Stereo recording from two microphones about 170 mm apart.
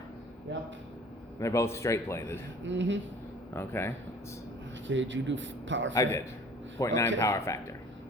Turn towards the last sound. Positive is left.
turn(degrees=15)  # may be behind; listen again after turning